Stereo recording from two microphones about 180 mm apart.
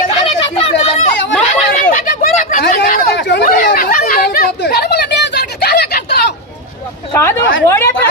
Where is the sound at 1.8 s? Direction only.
50° left (ahead or behind).